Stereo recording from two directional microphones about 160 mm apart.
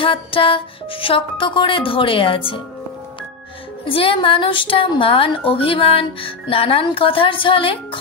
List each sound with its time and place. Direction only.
0.0 s speech: 35° left (ahead or behind)
3.8 s speech: 35° left (ahead or behind)